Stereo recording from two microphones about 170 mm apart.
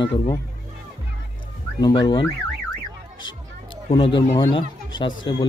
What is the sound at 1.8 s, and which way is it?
Speech, 25° left (ahead or behind).